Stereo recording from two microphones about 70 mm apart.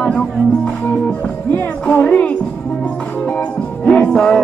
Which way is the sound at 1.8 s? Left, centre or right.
Centre.